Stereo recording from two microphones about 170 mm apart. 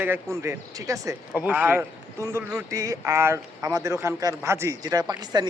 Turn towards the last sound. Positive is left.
turn(degrees=-25)  # may be behind; listen again after turning